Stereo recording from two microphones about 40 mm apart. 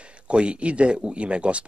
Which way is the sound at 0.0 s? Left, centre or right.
Right.